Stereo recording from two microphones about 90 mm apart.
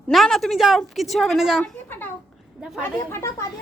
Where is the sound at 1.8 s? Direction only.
25° left (ahead or behind).